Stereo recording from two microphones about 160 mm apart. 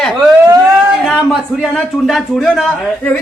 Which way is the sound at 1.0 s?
Centre (ahead or behind).